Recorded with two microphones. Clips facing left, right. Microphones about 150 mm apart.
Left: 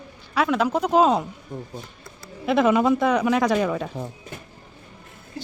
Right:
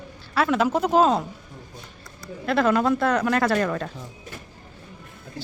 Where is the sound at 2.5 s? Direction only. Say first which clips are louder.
Left 2 dB; 5° left (ahead or behind).